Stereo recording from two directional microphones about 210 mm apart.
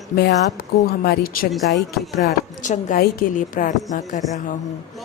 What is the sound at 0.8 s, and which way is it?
Speech, 45° left (ahead or behind).